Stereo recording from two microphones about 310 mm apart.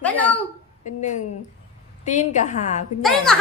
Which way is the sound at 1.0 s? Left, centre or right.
Left.